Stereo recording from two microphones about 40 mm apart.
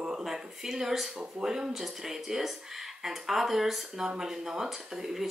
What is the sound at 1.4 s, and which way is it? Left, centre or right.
Speech, centre.